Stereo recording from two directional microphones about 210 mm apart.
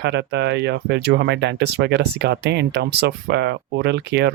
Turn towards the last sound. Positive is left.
turn(degrees=-55)  # may be behind; listen again after turning